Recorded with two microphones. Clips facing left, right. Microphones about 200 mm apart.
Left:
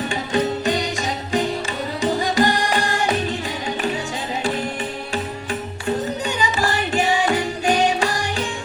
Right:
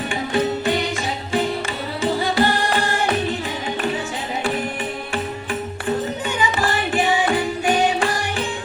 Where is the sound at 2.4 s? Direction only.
15° left (ahead or behind).